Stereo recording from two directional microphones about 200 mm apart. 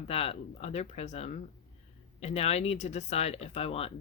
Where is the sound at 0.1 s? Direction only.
30° left (ahead or behind).